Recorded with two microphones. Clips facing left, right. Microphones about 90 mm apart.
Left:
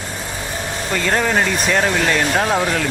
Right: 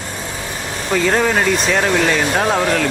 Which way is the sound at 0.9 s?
Centre (ahead or behind).